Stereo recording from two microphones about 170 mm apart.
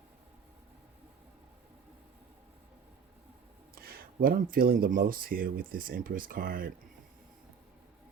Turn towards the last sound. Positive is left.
turn(degrees=-55)  # may be behind; listen again after turning